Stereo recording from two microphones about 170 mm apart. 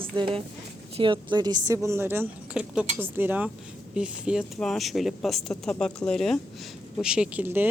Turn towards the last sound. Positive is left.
turn(degrees=-10)  # may be behind; listen again after turning